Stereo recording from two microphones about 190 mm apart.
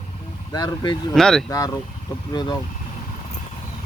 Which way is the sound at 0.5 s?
20° left (ahead or behind).